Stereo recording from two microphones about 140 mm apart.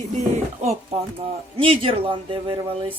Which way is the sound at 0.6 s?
45° right (ahead or behind).